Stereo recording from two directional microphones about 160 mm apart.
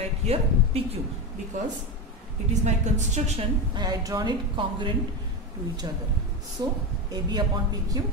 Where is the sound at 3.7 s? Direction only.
25° right (ahead or behind).